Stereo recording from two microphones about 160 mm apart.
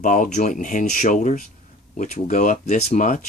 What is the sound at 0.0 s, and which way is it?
Speech, 55° left (ahead or behind).